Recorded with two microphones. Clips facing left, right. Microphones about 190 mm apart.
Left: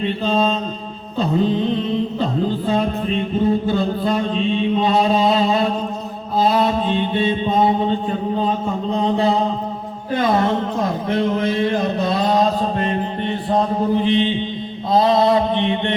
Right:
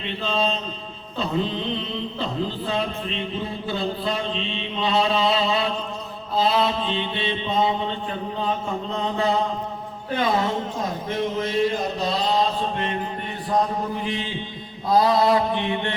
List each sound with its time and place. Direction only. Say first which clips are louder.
0.0 s mantra: left 7 dB; 45° left (ahead or behind)
8.9 s a sound: left 7 dB; 35° left (ahead or behind)
11.1 s mantra: left 5 dB; 65° left (ahead or behind); by 16.0 s 20° left (ahead or behind)